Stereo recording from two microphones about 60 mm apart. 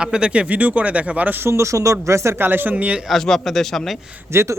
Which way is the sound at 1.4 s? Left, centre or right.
Right.